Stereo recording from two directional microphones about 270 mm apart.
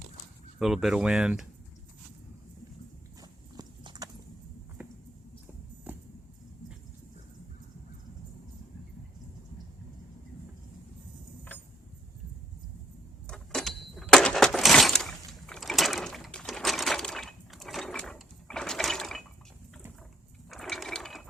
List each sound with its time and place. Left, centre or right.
0.6 s speech: centre
3.2 s horse: centre
13.2 s a sound: centre
20.5 s ratchet: centre